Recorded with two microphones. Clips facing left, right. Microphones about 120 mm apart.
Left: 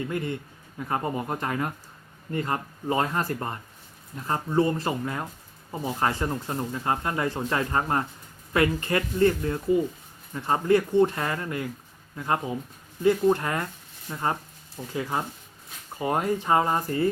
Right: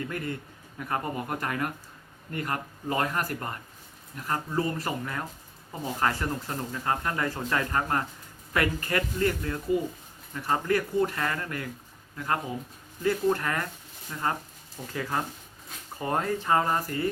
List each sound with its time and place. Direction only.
0.1 s speech: 25° left (ahead or behind)